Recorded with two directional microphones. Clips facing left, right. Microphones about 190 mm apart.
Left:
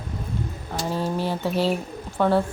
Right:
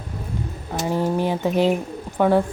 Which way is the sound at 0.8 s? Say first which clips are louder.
Right 4 dB; 15° right (ahead or behind).